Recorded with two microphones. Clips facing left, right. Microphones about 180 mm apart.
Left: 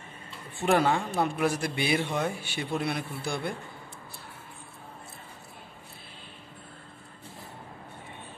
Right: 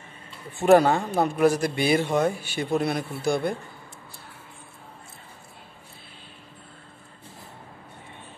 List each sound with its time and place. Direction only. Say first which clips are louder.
0.6 s speech: right 7 dB; 40° right (ahead or behind)